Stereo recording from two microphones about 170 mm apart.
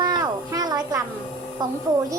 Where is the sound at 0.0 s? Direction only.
25° right (ahead or behind).